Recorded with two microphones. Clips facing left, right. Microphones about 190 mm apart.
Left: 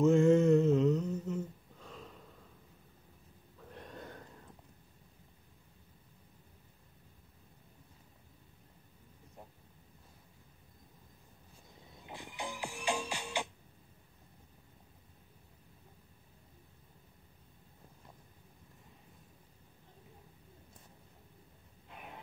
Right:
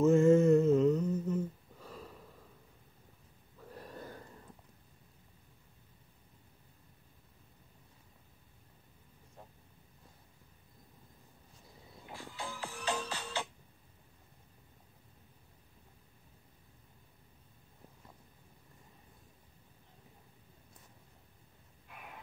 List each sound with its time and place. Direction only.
0.0 s humming: centre (ahead or behind)
3.7 s wheeze: 5° right (ahead or behind)
12.1 s music: 20° left (ahead or behind)
21.8 s a sound: 25° left (ahead or behind)